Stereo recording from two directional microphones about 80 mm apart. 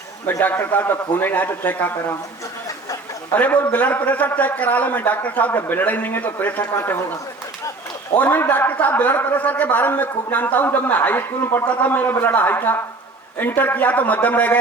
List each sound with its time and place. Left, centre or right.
0.4 s a man's voice: left
3.3 s a man's voice: centre
8.1 s a man's voice: left